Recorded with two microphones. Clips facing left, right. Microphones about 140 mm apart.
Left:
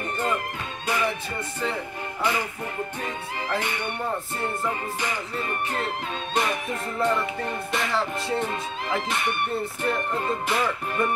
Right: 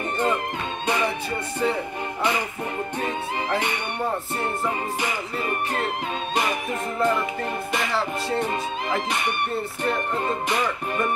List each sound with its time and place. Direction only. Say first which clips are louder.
0.8 s music: right 1 dB; 20° right (ahead or behind)
3.0 s music: right 5 dB; 20° right (ahead or behind)
6.3 s music: even; 5° right (ahead or behind)